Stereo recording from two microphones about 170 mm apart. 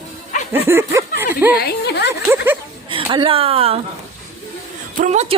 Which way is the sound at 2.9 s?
30° right (ahead or behind).